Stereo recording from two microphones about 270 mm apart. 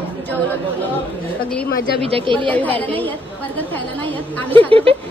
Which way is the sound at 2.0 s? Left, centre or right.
Centre.